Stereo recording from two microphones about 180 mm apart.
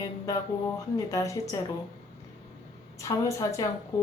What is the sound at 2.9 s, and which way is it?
Speech, 15° left (ahead or behind).